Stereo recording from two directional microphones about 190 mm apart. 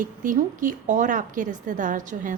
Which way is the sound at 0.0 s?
45° right (ahead or behind).